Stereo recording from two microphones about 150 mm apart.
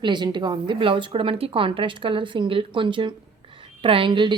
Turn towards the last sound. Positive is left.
turn(degrees=-35)  # may be behind; listen again after turning